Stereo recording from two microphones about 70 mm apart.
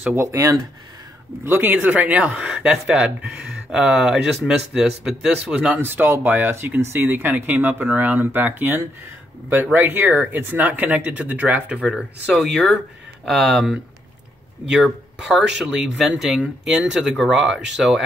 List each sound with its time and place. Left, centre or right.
0.1 s speech: right
1.4 s speech: right; by 5.8 s centre
5.8 s speech: right
12.0 s speech: centre